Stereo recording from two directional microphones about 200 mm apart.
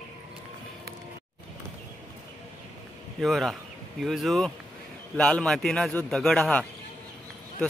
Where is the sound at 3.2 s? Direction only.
Centre (ahead or behind).